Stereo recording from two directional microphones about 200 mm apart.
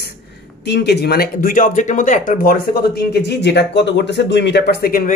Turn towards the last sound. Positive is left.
turn(degrees=50)  # may be behind; listen again after turning